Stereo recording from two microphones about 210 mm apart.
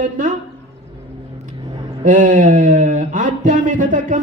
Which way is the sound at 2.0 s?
40° right (ahead or behind).